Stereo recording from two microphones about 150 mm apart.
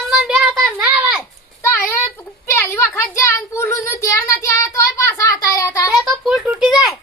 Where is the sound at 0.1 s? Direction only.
5° right (ahead or behind).